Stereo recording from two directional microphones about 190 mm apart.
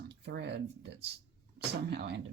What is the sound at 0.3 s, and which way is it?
Speech, 70° right (ahead or behind).